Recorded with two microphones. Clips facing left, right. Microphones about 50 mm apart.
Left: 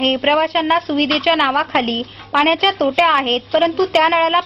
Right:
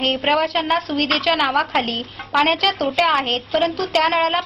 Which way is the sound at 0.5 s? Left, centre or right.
Centre.